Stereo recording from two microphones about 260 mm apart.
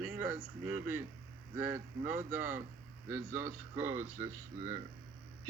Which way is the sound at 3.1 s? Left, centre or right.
Centre.